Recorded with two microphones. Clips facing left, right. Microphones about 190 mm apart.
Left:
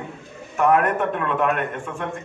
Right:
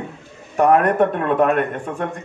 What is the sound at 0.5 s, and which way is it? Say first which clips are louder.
A man's voice: right 3 dB; 35° right (ahead or behind).